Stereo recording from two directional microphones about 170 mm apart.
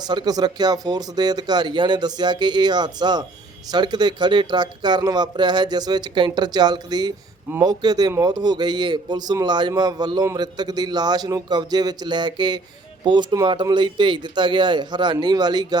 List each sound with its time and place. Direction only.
0.1 s a man's voice: 25° right (ahead or behind)